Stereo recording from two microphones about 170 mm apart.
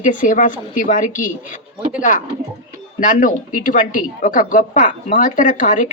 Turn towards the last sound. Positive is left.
turn(degrees=50)  # may be behind; listen again after turning